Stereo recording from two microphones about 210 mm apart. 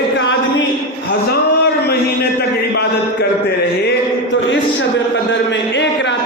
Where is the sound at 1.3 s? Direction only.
50° left (ahead or behind).